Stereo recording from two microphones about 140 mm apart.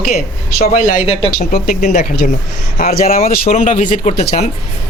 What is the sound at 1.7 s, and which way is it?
Speech, 55° left (ahead or behind).